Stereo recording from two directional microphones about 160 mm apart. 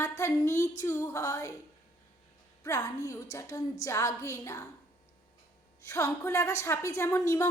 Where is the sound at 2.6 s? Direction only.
20° left (ahead or behind).